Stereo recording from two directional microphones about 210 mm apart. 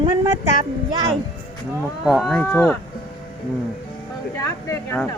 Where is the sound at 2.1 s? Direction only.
Centre (ahead or behind).